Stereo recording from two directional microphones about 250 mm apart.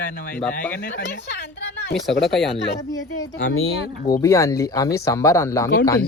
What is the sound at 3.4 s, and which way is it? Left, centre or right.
Speech, left.